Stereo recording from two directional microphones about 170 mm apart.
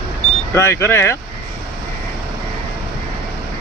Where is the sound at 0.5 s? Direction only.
15° left (ahead or behind).